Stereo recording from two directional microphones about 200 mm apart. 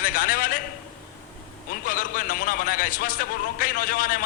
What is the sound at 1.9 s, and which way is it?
A man's voice, 45° left (ahead or behind).